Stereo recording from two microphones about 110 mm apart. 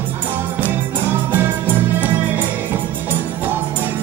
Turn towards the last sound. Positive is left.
turn(degrees=-15)  # may be behind; listen again after turning